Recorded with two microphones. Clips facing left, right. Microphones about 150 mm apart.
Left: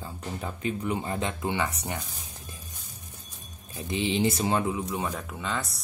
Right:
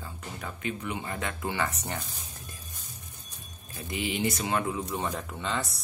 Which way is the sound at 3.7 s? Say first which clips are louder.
Left 5 dB; 25° left (ahead or behind).